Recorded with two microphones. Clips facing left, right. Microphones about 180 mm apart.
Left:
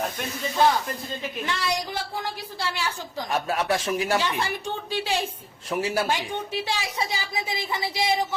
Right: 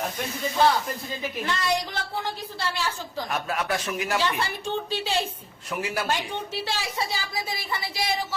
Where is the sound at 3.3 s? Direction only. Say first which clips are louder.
Left 4 dB; 30° left (ahead or behind).